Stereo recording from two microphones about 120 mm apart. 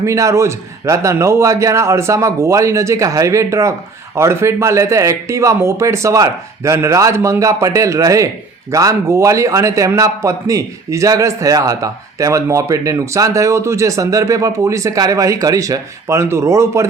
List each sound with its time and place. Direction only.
0.0 s a man's voice: 25° right (ahead or behind)